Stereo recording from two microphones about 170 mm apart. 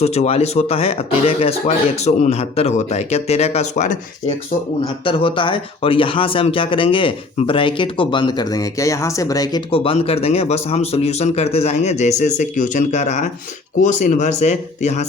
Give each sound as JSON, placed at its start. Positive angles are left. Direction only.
{"t": 0.0, "sound": "speech", "side_deg": 40}
{"t": 5.0, "sound": "a man's voice", "side_deg": 30}